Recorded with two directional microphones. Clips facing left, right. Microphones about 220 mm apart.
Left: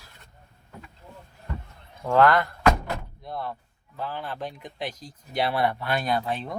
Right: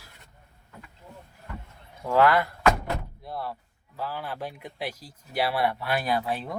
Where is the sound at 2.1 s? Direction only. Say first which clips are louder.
Left 1 dB; 5° right (ahead or behind).